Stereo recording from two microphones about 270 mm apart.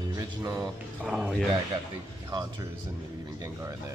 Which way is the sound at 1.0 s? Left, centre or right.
Centre.